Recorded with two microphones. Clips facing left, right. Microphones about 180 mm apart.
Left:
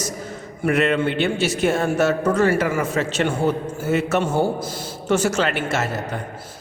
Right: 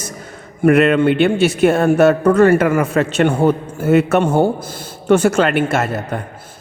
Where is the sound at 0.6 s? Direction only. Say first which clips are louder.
Right 7 dB; 60° right (ahead or behind).